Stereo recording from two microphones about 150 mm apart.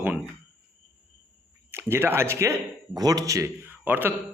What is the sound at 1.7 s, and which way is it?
A man's voice, 15° right (ahead or behind).